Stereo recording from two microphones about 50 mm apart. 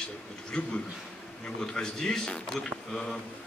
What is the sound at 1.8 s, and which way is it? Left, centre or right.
Speech, centre.